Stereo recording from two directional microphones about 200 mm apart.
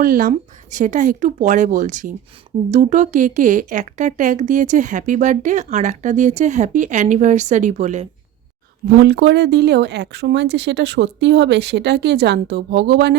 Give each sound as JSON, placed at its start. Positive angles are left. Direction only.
{"t": 0.0, "sound": "speech", "side_deg": -45}
{"t": 9.0, "sound": "speech", "side_deg": -55}